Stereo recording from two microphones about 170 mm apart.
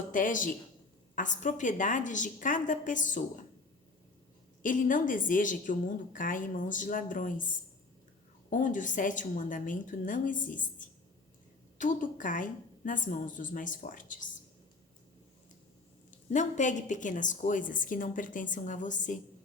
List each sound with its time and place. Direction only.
0.1 s a woman's voice: 50° left (ahead or behind)
4.6 s a woman's voice: 50° left (ahead or behind)
8.4 s a woman's voice: 50° left (ahead or behind)
16.3 s a woman's voice: 45° left (ahead or behind)